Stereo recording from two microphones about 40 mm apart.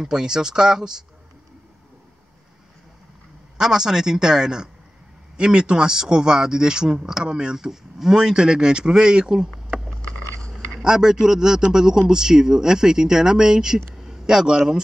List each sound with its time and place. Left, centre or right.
0.0 s speech: centre
3.5 s speech: centre
7.5 s speech: centre
10.8 s speech: centre